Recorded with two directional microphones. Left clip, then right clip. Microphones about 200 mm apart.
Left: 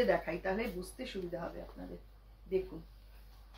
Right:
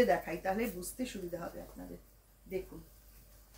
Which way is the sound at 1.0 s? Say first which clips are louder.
Right 5 dB; 15° right (ahead or behind).